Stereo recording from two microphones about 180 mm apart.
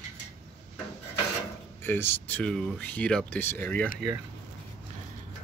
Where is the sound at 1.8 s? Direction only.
10° left (ahead or behind).